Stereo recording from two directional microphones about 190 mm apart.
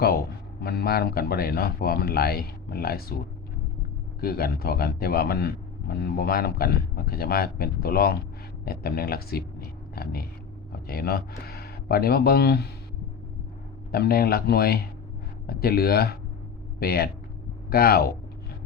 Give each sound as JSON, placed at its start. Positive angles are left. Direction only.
{"t": 0.6, "sound": "speech", "side_deg": 55}
{"t": 4.2, "sound": "speech", "side_deg": 55}
{"t": 13.9, "sound": "speech", "side_deg": 55}